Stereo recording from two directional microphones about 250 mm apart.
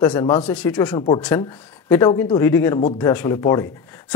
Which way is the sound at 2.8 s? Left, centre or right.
Left.